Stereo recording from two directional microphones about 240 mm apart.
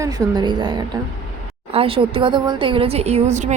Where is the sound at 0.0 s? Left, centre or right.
Centre.